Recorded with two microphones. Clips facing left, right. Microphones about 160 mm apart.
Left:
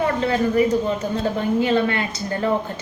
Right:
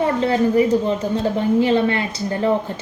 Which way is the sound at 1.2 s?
30° right (ahead or behind).